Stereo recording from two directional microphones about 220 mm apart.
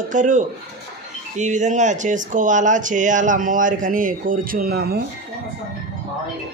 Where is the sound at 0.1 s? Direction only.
35° right (ahead or behind).